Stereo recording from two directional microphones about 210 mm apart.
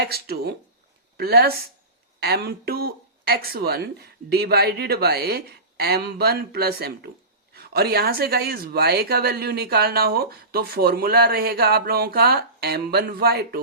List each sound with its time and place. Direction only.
0.0 s a woman's voice: 50° right (ahead or behind)